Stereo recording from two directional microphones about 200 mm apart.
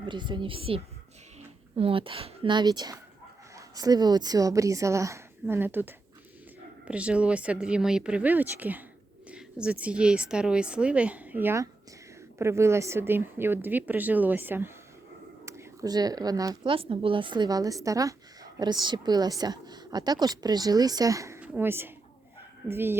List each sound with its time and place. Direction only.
0.0 s a woman's voice: 25° right (ahead or behind)